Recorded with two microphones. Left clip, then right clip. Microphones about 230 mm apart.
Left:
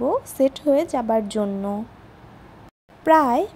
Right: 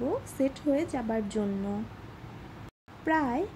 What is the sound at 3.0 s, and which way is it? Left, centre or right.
Speech, left.